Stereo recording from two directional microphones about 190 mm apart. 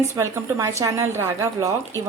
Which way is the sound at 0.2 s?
15° right (ahead or behind).